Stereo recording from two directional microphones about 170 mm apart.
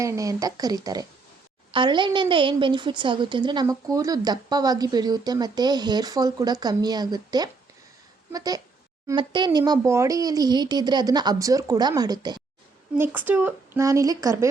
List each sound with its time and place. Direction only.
0.0 s a woman's voice: 20° right (ahead or behind)
13.0 s a woman's voice: 10° right (ahead or behind)